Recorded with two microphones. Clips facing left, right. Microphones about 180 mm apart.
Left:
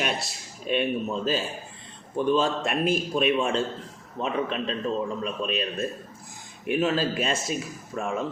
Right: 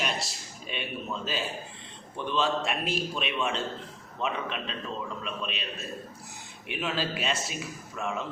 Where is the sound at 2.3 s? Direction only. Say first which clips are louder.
Left 4 dB; 45° left (ahead or behind).